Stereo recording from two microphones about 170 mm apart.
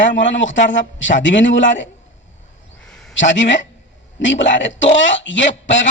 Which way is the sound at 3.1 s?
90° left.